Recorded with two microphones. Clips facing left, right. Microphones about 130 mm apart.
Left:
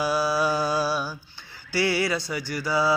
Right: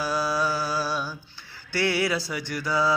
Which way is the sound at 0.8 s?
5° left (ahead or behind).